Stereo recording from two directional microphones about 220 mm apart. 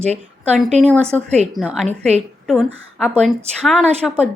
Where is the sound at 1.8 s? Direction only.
30° right (ahead or behind).